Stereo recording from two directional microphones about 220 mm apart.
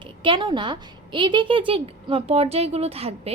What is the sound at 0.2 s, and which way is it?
A woman's voice, 20° right (ahead or behind).